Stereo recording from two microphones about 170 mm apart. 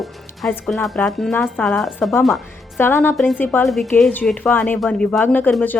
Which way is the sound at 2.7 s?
15° left (ahead or behind).